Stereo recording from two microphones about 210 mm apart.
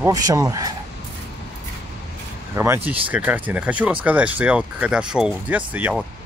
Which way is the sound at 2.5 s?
10° right (ahead or behind).